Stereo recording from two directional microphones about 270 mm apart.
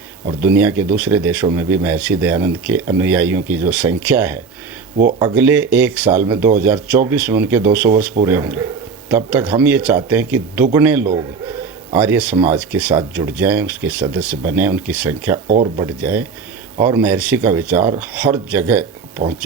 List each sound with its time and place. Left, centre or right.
0.4 s speech: centre
6.1 s speech: centre
6.6 s speech: centre
11.0 s speech: centre
11.9 s speech: centre
15.4 s speech: right
16.0 s speech: centre